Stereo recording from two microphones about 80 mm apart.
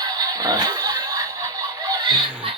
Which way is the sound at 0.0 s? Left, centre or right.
Right.